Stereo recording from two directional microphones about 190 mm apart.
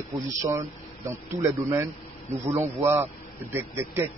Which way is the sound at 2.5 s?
35° right (ahead or behind).